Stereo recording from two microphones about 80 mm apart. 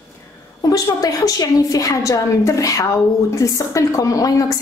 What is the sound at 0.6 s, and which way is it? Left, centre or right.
A woman's voice, left.